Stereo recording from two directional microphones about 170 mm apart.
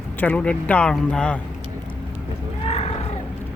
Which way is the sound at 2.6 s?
40° left (ahead or behind).